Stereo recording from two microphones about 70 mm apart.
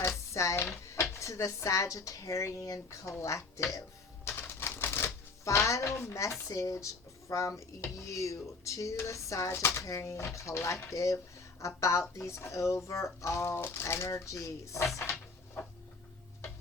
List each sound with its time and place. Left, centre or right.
0.3 s speech: left
4.3 s typewriter: left
6.5 s speech: left
15.6 s a sound: left